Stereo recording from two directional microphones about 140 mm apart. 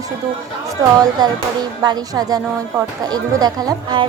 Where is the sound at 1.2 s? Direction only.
30° right (ahead or behind).